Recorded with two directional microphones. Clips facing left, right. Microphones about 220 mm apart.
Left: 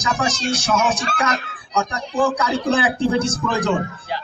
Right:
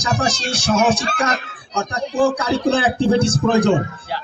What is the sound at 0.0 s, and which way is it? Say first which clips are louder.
Speech: right 1 dB; 35° right (ahead or behind).